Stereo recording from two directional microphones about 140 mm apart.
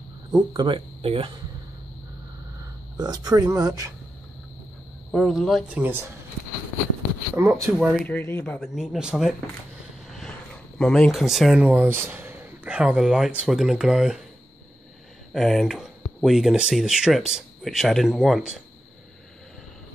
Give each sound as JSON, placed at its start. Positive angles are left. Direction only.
{"t": 0.5, "sound": "speech", "side_deg": -35}
{"t": 3.0, "sound": "speech", "side_deg": -25}
{"t": 5.1, "sound": "speech", "side_deg": 0}
{"t": 5.8, "sound": "speech", "side_deg": -15}
{"t": 7.4, "sound": "speech", "side_deg": -20}
{"t": 7.7, "sound": "speech", "side_deg": -5}
{"t": 8.0, "sound": "speech", "side_deg": 15}
{"t": 8.5, "sound": "speech", "side_deg": -5}
{"t": 10.8, "sound": "speech", "side_deg": 5}
{"t": 15.3, "sound": "speech", "side_deg": 0}